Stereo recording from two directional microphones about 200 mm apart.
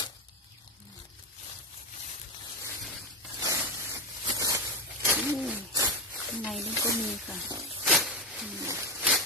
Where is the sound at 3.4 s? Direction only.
15° right (ahead or behind).